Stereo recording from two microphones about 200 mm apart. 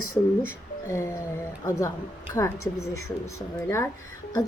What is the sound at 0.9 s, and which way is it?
Speech, 15° left (ahead or behind).